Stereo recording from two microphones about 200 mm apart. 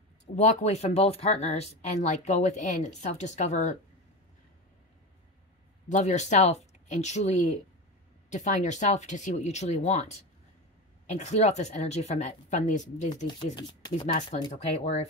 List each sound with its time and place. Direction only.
0.4 s speech: 35° left (ahead or behind)
5.9 s speech: 35° left (ahead or behind)
11.1 s speech: 35° left (ahead or behind)